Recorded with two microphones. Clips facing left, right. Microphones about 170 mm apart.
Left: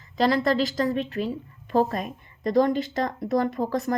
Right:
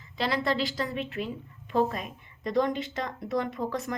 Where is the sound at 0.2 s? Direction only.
40° left (ahead or behind).